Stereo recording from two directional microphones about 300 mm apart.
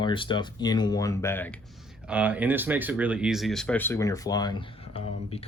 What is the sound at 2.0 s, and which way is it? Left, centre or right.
Speech, centre.